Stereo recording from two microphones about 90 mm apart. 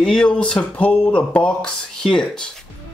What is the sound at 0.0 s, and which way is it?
Speech, 10° left (ahead or behind).